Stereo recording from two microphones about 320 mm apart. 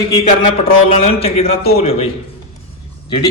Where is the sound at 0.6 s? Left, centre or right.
Centre.